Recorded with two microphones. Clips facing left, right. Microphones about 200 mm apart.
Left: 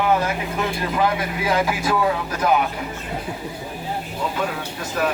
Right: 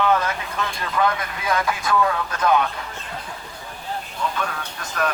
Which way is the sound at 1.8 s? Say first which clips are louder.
Left 1 dB; 20° left (ahead or behind).